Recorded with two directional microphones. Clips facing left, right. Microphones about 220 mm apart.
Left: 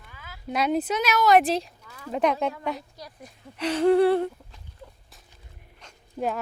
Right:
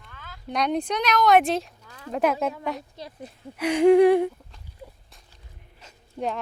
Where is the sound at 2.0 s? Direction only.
5° right (ahead or behind).